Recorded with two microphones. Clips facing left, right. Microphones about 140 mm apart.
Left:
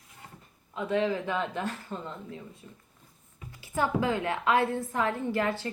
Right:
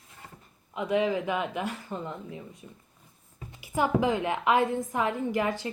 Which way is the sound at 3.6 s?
15° right (ahead or behind).